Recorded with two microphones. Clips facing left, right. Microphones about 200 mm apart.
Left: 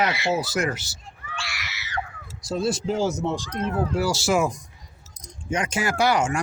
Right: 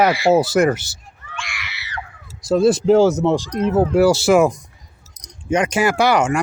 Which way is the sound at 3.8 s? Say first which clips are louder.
Right 11 dB; 60° right (ahead or behind).